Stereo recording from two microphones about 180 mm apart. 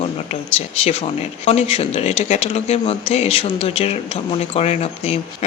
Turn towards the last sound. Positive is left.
turn(degrees=35)  # may be behind; listen again after turning